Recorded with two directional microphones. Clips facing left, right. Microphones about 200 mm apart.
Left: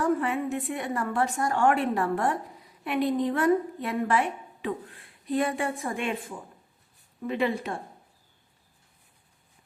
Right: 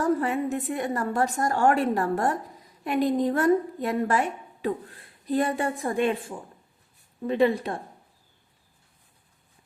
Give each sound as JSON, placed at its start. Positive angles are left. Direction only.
{"t": 0.0, "sound": "a woman's voice", "side_deg": -40}